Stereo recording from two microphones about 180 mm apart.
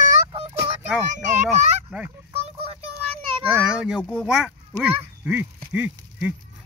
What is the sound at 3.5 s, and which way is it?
Speech, 5° right (ahead or behind).